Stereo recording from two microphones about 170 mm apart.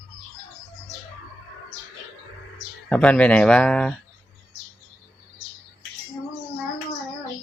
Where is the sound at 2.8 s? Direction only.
10° left (ahead or behind).